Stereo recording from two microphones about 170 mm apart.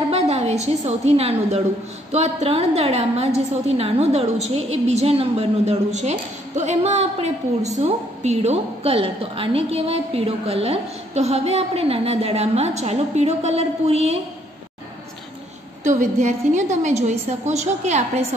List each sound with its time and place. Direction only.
0.1 s a woman's voice: 40° right (ahead or behind)
15.8 s a woman's voice: 45° right (ahead or behind)